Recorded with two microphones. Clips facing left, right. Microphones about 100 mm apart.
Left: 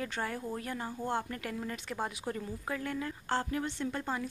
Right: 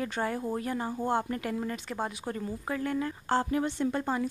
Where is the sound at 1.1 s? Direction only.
10° right (ahead or behind).